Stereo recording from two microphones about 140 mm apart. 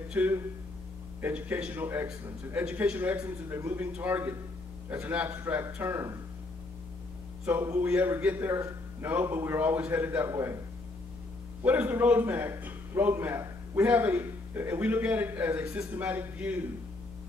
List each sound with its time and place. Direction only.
0.1 s a man's voice: 10° right (ahead or behind)
7.4 s a man's voice: 15° right (ahead or behind)
11.6 s a man's voice: 10° right (ahead or behind)